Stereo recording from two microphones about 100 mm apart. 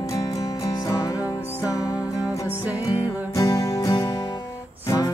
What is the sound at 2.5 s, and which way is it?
Music, 15° right (ahead or behind).